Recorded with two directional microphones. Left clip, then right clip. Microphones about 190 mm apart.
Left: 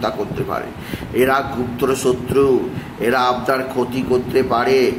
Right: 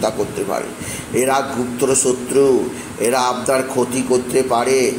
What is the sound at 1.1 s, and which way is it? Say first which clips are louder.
A man's voice: left 1 dB; 5° left (ahead or behind).